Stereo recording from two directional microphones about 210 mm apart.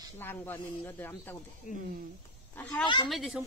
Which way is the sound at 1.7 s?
35° left (ahead or behind).